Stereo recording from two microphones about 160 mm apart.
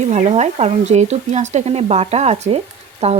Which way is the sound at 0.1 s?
45° right (ahead or behind).